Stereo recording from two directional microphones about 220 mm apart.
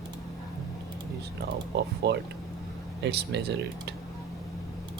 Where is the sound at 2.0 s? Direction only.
50° right (ahead or behind).